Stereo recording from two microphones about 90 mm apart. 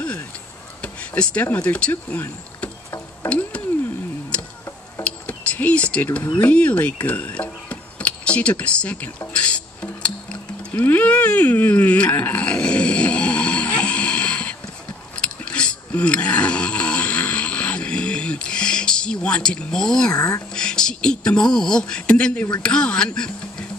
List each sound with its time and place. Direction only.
1.1 s speech: 15° left (ahead or behind)
3.3 s a sound: 15° left (ahead or behind)
5.0 s a sound: 15° left (ahead or behind)
6.4 s speech: 15° left (ahead or behind)
9.3 s music: 10° left (ahead or behind)
10.7 s speech: 20° left (ahead or behind)
15.1 s a sound: 10° left (ahead or behind)
20.1 s speech: 40° left (ahead or behind)
20.5 s speech: 10° left (ahead or behind)